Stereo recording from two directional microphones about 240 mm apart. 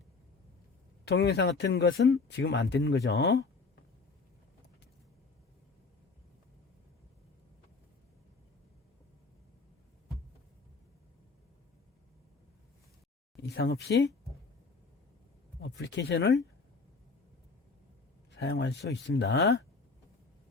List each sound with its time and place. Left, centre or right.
1.0 s speech: left
13.4 s speech: left
15.6 s speech: left
18.3 s speech: left